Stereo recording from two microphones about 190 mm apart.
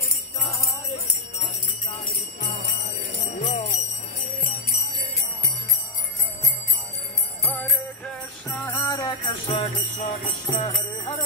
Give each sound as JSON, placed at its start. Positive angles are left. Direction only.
{"t": 2.0, "sound": "jingle bell", "side_deg": 60}
{"t": 3.3, "sound": "jingle bell", "side_deg": 35}
{"t": 4.4, "sound": "jingle bell", "side_deg": 50}
{"t": 8.5, "sound": "jingle bell", "side_deg": 10}